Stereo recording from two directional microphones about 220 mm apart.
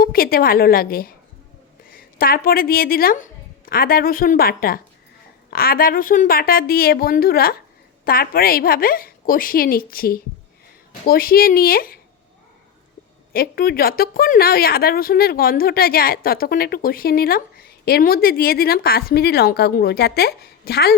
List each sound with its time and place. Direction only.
0.0 s a woman's voice: 40° left (ahead or behind)
13.3 s a woman's voice: 40° left (ahead or behind)